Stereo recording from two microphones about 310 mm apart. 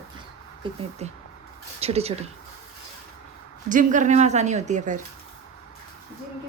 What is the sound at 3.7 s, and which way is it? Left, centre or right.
A woman's voice, right.